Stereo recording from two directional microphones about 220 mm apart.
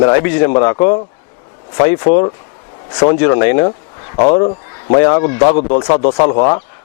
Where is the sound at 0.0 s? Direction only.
25° left (ahead or behind).